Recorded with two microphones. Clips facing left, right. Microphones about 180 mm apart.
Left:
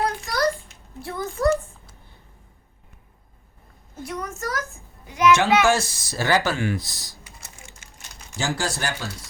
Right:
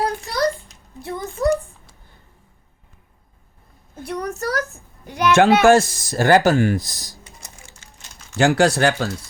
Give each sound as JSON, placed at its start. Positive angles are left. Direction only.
{"t": 0.0, "sound": "a sound", "side_deg": -35}
{"t": 1.0, "sound": "a child's voice", "side_deg": -20}
{"t": 4.1, "sound": "a child's voice", "side_deg": -35}
{"t": 5.3, "sound": "speech", "side_deg": -55}
{"t": 8.4, "sound": "speech", "side_deg": -65}